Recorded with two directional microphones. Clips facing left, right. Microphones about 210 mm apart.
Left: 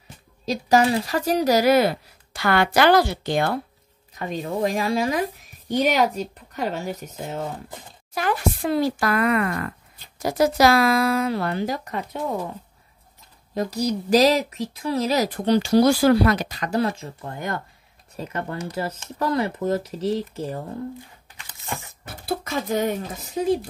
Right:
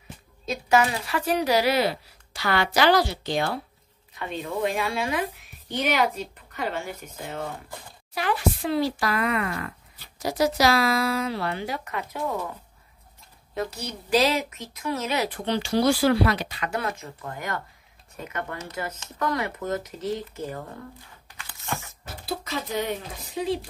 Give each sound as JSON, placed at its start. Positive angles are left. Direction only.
{"t": 0.5, "sound": "speech", "side_deg": 35}
{"t": 4.1, "sound": "speech", "side_deg": 40}
{"t": 13.6, "sound": "speech", "side_deg": 40}
{"t": 22.0, "sound": "speech", "side_deg": 55}